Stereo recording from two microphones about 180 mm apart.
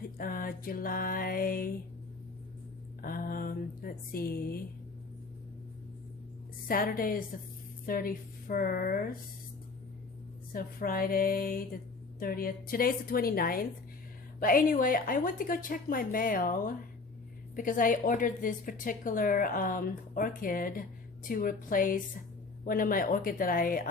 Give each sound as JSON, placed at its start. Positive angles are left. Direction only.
{"t": 0.2, "sound": "a sound", "side_deg": 55}
{"t": 3.0, "sound": "a woman's voice", "side_deg": 50}
{"t": 6.7, "sound": "a woman's voice", "side_deg": 55}
{"t": 10.5, "sound": "a woman's voice", "side_deg": 55}